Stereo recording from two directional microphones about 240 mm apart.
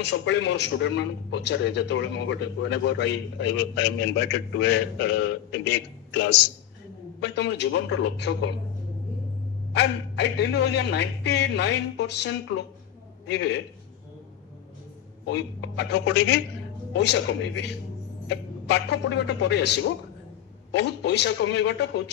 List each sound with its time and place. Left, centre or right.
0.0 s a man's voice: left
9.8 s a man's voice: left
15.3 s a man's voice: left